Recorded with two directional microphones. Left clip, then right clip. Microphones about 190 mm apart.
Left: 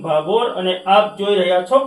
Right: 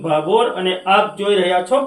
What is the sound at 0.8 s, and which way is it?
Speech, 25° right (ahead or behind).